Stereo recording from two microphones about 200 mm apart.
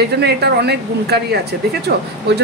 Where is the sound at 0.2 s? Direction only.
55° right (ahead or behind).